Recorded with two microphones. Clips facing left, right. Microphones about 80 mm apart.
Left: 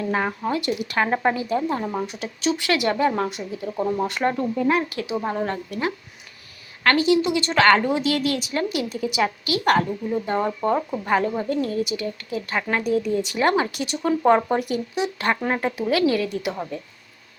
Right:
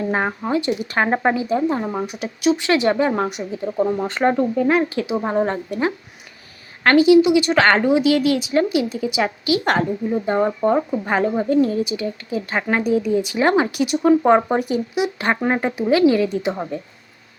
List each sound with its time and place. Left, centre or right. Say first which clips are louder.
0.0 s a woman's voice: right 2 dB; right